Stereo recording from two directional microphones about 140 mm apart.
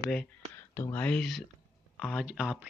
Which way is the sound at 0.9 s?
5° left (ahead or behind).